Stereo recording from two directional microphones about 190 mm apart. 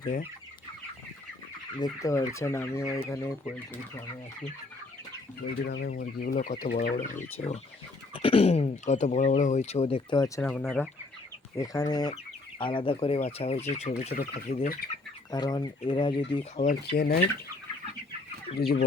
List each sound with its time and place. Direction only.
0.0 s speech: 45° left (ahead or behind)
1.8 s fowl: 15° left (ahead or behind)
5.6 s speech: 60° left (ahead or behind)
5.9 s speech: 50° left (ahead or behind)
8.1 s speech: 30° left (ahead or behind)
10.4 s speech: 5° left (ahead or behind)
11.6 s speech: 20° left (ahead or behind); by 17.2 s 50° left (ahead or behind)
18.5 s speech: 55° left (ahead or behind)